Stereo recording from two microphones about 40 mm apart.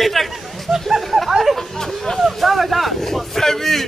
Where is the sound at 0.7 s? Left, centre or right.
Centre.